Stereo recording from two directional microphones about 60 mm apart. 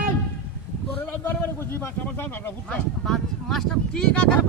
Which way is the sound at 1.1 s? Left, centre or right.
Left.